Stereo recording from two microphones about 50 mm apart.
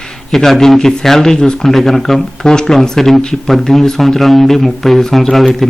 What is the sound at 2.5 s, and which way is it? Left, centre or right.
Speech, centre.